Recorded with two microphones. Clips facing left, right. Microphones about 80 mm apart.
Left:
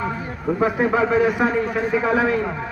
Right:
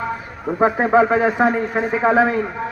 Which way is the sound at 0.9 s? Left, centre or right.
Right.